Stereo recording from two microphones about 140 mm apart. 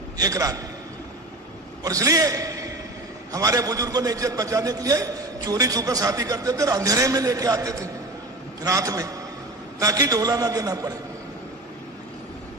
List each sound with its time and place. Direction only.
0.2 s a man's voice: 25° right (ahead or behind)
1.8 s a man's voice: 25° right (ahead or behind)